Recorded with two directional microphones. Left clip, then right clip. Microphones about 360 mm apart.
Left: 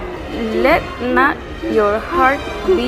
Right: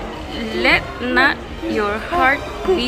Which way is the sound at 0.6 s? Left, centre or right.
Centre.